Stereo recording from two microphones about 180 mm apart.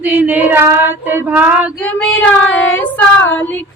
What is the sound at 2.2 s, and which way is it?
Child singing, 5° left (ahead or behind).